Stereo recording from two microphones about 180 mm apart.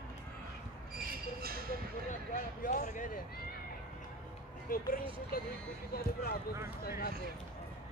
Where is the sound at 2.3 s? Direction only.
45° left (ahead or behind).